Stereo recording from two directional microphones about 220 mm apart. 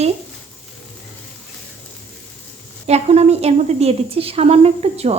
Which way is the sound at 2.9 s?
30° right (ahead or behind).